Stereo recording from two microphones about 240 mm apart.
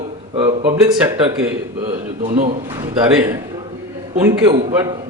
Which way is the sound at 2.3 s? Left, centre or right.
Right.